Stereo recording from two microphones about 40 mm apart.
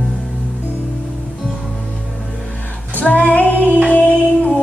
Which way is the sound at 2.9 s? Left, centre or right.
Left.